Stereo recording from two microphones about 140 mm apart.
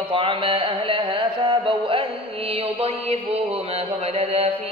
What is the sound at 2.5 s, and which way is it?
Mantra, 45° right (ahead or behind).